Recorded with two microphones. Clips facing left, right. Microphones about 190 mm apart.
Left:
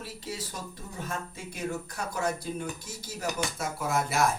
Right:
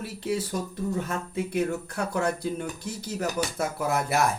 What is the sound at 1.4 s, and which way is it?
A man's voice, 60° right (ahead or behind).